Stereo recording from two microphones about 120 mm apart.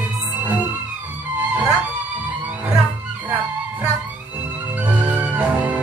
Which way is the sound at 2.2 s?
10° right (ahead or behind).